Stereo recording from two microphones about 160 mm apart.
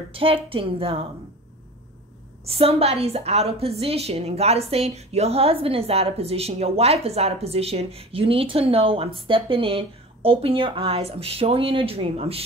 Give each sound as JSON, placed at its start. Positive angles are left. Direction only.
{"t": 0.1, "sound": "a woman's voice", "side_deg": -35}
{"t": 2.4, "sound": "a woman's voice", "side_deg": -35}